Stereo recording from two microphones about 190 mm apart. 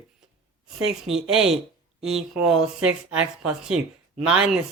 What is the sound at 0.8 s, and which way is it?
Speech, centre (ahead or behind).